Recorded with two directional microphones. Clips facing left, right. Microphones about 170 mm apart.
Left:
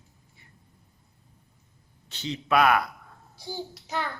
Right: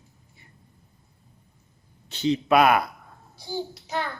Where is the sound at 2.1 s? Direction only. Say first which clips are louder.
Right 5 dB; 15° right (ahead or behind).